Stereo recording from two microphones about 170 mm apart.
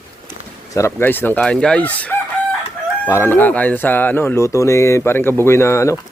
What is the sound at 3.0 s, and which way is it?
Speech, 15° left (ahead or behind).